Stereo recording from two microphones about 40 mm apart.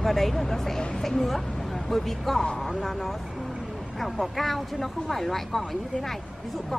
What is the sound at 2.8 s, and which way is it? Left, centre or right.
Speech, centre.